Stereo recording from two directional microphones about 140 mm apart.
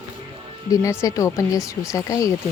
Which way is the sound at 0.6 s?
25° left (ahead or behind).